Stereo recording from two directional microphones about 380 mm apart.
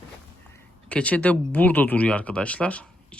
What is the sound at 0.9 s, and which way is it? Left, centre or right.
Speech, centre.